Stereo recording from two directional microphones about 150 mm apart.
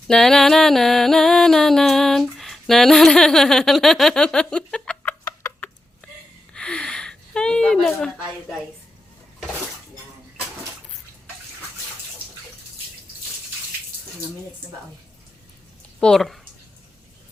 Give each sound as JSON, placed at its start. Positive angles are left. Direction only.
{"t": 0.1, "sound": "music", "side_deg": 5}
{"t": 5.2, "sound": "chicken", "side_deg": 20}
{"t": 6.5, "sound": "a sound", "side_deg": 5}
{"t": 16.0, "sound": "speech", "side_deg": 5}